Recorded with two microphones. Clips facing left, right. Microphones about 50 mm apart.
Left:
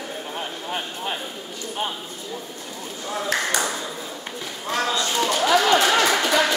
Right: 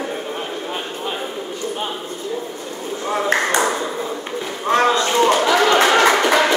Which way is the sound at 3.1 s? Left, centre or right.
Right.